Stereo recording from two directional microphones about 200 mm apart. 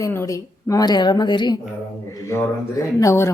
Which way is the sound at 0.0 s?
15° left (ahead or behind).